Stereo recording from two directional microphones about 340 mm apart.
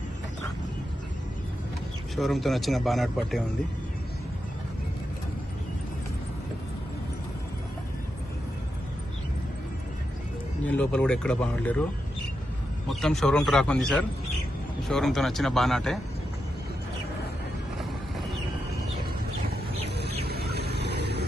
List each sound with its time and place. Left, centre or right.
2.1 s a man's voice: centre
10.7 s a man's voice: centre
12.9 s a man's voice: centre
20.2 s a sound: right